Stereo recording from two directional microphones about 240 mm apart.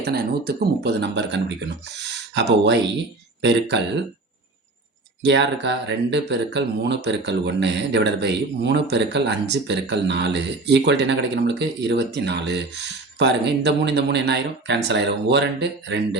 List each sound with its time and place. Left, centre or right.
0.0 s speech: right
5.2 s speech: right